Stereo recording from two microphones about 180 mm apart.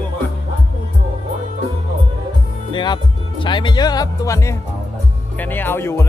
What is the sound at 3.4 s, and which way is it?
Speech, 25° left (ahead or behind).